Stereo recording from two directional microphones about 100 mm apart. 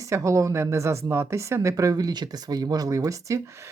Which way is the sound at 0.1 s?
30° right (ahead or behind).